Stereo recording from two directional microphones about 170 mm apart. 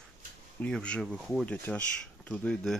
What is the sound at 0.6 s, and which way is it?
Speech, 5° left (ahead or behind).